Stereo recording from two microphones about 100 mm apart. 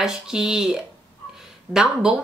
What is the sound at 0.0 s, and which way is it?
Speech, 5° right (ahead or behind).